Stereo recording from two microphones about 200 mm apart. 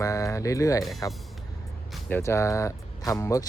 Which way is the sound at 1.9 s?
10° left (ahead or behind).